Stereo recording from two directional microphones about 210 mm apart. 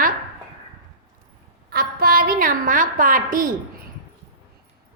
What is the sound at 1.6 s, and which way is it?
A woman's voice, 45° right (ahead or behind).